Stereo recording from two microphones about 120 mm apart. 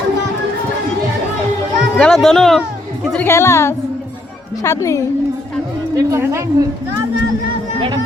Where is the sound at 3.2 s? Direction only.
20° left (ahead or behind).